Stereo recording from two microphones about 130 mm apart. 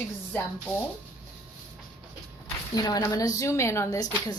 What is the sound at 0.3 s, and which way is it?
Speech, 15° left (ahead or behind).